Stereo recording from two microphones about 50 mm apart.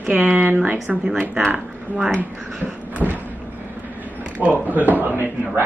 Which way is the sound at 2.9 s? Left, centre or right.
Right.